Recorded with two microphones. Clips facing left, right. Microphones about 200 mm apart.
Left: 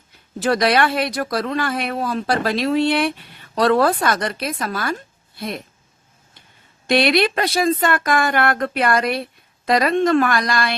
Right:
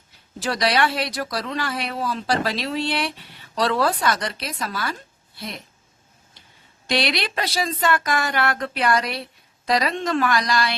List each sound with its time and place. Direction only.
0.3 s speech: 55° left (ahead or behind)
6.8 s speech: 55° left (ahead or behind)